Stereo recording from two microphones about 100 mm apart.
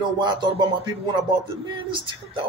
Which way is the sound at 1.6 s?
55° right (ahead or behind).